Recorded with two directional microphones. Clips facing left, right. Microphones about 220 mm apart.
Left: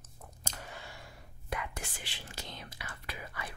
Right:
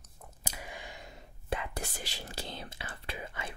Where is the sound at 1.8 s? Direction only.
40° right (ahead or behind).